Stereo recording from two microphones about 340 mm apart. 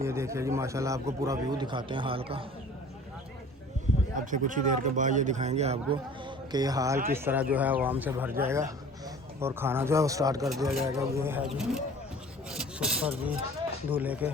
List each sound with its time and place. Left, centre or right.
0.0 s a man's voice: centre
4.1 s a man's voice: right; by 14.3 s centre